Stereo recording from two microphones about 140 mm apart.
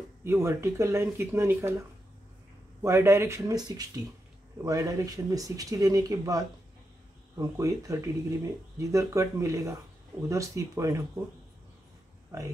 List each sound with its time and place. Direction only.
0.2 s speech: 20° right (ahead or behind)
2.8 s speech: 20° right (ahead or behind)